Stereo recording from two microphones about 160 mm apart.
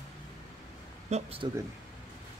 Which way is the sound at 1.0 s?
45° right (ahead or behind).